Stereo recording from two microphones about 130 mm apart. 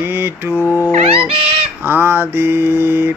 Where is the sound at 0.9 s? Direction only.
50° right (ahead or behind).